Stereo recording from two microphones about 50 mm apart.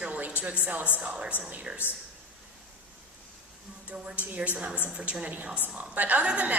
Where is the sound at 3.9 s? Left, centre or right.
Centre.